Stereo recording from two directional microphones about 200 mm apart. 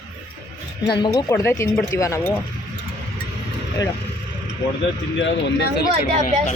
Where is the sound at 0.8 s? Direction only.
20° left (ahead or behind).